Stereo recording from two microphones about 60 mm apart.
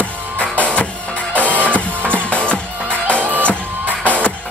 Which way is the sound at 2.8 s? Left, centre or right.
Right.